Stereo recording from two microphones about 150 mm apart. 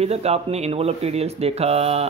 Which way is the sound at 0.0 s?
45° right (ahead or behind).